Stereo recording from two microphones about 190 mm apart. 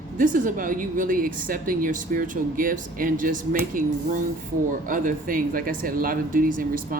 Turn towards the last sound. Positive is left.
turn(degrees=-45)  # may be behind; listen again after turning